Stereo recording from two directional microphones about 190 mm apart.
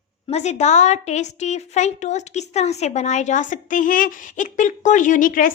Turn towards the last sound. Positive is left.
turn(degrees=45)  # may be behind; listen again after turning